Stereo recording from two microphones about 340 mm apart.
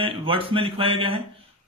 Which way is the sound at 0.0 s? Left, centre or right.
Centre.